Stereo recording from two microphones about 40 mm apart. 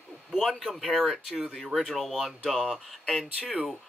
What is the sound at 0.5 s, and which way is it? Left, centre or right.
Speech, centre.